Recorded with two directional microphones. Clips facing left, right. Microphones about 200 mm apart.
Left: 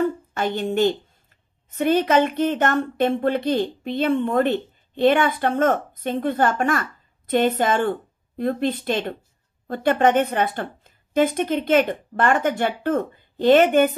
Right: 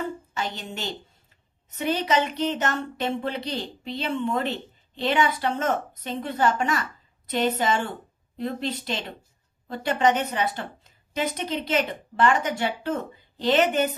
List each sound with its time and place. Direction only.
0.3 s a woman's voice: 55° left (ahead or behind)